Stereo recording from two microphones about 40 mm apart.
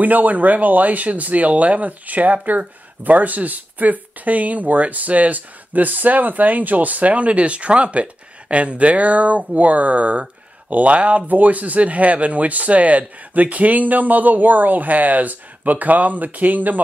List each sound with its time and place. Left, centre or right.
0.0 s speech: right